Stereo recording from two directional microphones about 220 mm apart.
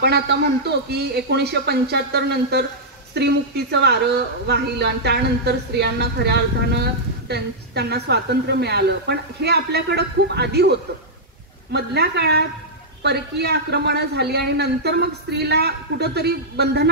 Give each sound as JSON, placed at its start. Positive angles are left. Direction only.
{"t": 0.0, "sound": "a woman's voice", "side_deg": -50}
{"t": 11.7, "sound": "a woman's voice", "side_deg": -50}